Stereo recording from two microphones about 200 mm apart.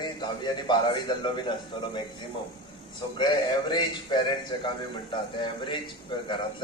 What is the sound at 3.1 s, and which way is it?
A man's voice, 20° left (ahead or behind).